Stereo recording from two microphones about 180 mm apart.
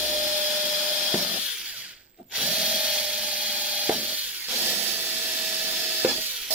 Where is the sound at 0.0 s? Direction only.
5° right (ahead or behind).